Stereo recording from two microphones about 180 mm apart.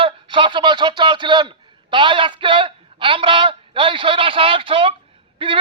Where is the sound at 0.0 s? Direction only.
30° right (ahead or behind).